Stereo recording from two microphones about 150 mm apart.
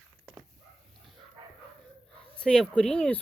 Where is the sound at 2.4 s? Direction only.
5° left (ahead or behind).